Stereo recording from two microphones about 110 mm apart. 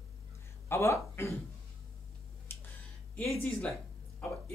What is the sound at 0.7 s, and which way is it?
Speech, 25° left (ahead or behind).